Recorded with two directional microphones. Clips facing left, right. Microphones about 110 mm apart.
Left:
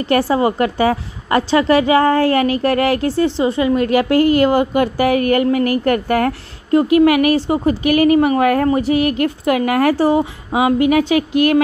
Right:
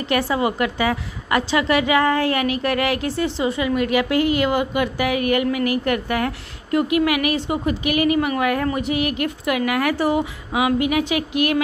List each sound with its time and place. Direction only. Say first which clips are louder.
0.1 s a woman's voice: left 5 dB; 35° left (ahead or behind)
6.7 s a woman's voice: left 7 dB; 35° left (ahead or behind)